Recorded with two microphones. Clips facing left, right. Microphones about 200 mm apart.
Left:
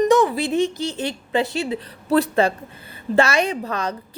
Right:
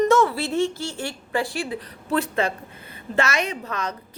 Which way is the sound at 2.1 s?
35° left (ahead or behind).